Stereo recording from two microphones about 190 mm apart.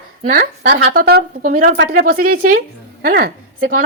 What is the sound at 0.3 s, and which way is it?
Speech, 55° right (ahead or behind).